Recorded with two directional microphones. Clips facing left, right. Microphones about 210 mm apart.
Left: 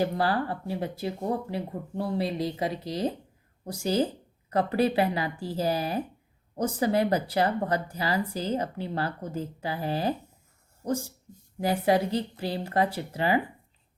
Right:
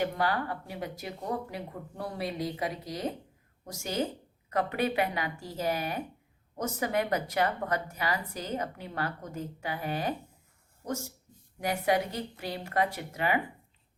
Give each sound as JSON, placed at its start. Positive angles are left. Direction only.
{"t": 0.0, "sound": "a woman's voice", "side_deg": 30}
{"t": 11.6, "sound": "a woman's voice", "side_deg": 30}